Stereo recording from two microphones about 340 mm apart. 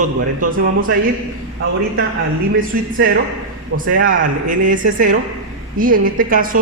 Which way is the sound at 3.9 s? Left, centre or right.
Right.